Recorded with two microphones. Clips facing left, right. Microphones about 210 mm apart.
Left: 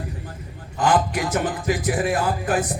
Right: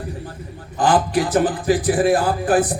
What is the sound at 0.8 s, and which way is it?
Speech, 35° right (ahead or behind).